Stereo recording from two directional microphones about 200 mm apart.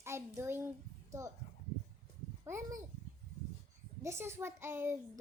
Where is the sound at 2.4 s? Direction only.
15° right (ahead or behind).